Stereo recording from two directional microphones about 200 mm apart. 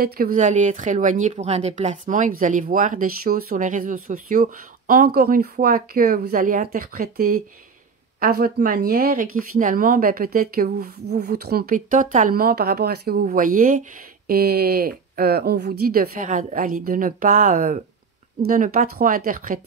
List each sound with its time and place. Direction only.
0.0 s speech: 45° right (ahead or behind)